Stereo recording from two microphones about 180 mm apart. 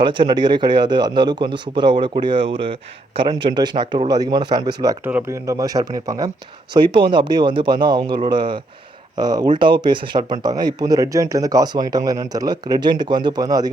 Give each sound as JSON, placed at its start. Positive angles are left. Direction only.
{"t": 0.0, "sound": "a man's voice", "side_deg": -25}